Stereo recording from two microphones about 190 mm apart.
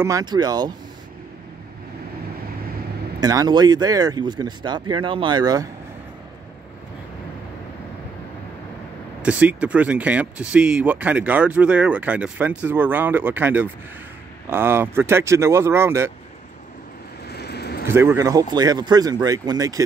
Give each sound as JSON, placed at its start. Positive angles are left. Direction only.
{"t": 0.0, "sound": "speech", "side_deg": -20}
{"t": 3.2, "sound": "speech", "side_deg": -20}
{"t": 9.2, "sound": "speech", "side_deg": -5}
{"t": 17.3, "sound": "vehicle", "side_deg": 60}
{"t": 17.8, "sound": "speech", "side_deg": -15}